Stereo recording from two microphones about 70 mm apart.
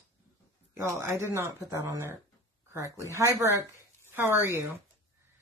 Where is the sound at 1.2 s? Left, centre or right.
Right.